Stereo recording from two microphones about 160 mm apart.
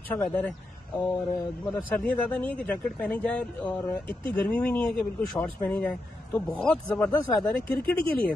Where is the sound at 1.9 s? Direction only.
5° left (ahead or behind).